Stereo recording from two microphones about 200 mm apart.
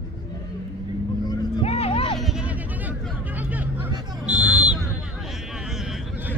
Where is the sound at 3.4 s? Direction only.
10° right (ahead or behind).